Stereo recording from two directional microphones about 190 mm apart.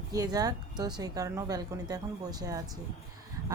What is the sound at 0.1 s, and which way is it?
Speech, 20° right (ahead or behind).